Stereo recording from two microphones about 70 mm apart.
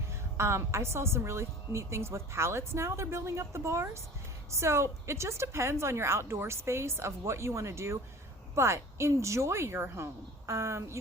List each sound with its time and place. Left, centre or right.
0.3 s a woman's voice: right